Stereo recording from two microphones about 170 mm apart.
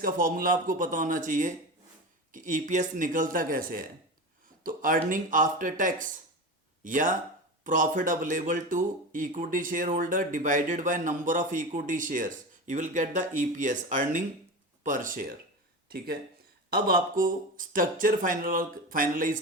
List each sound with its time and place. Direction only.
0.0 s a man's voice: 55° right (ahead or behind)
15.9 s a man's voice: 65° right (ahead or behind)